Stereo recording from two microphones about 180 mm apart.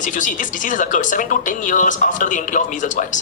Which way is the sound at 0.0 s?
45° left (ahead or behind).